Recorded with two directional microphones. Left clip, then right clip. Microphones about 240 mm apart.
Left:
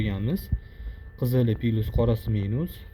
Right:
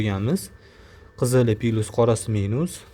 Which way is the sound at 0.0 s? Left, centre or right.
Right.